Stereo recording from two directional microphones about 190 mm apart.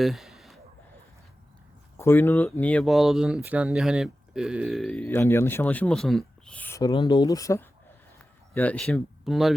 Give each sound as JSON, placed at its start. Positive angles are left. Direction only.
{"t": 0.0, "sound": "a sound", "side_deg": 0}
{"t": 2.0, "sound": "speech", "side_deg": 10}
{"t": 6.9, "sound": "speech", "side_deg": 25}